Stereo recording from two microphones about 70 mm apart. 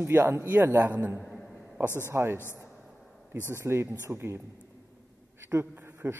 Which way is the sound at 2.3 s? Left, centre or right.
Left.